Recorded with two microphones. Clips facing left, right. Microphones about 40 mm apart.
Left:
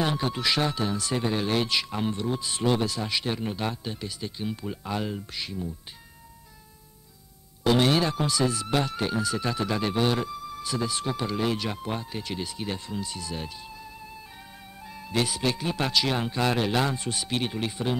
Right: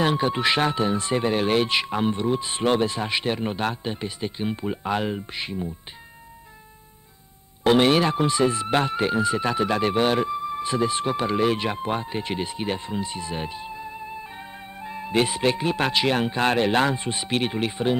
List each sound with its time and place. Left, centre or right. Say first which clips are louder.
0.0 s speech: right 5 dB; right
7.6 s speech: right 4 dB; right